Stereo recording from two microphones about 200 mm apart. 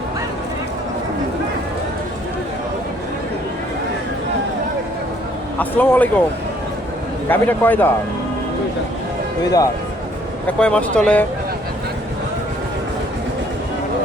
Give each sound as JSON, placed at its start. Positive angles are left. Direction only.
{"t": 5.5, "sound": "speech", "side_deg": 10}
{"t": 7.3, "sound": "speech", "side_deg": 10}
{"t": 9.4, "sound": "speech", "side_deg": 20}
{"t": 10.4, "sound": "speech", "side_deg": 5}